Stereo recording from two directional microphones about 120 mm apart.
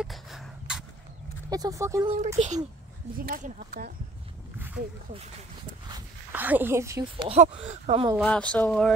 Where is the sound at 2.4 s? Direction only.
55° right (ahead or behind).